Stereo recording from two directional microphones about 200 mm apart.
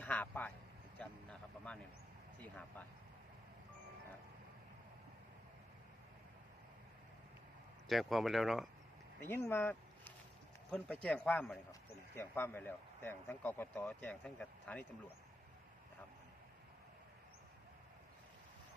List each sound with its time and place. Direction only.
0.0 s a sound: 10° left (ahead or behind)
0.9 s vehicle: 5° left (ahead or behind)
2.4 s speech: 10° left (ahead or behind)
7.9 s a man's voice: centre (ahead or behind)
9.3 s a man's voice: 10° left (ahead or behind)